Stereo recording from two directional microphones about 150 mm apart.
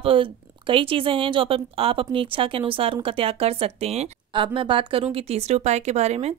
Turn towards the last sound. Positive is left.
turn(degrees=-45)  # may be behind; listen again after turning